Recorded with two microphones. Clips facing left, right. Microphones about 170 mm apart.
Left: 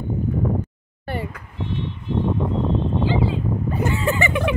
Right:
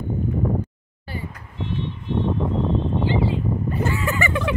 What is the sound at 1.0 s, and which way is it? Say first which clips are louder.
Vehicle: left 5 dB; 65° left (ahead or behind).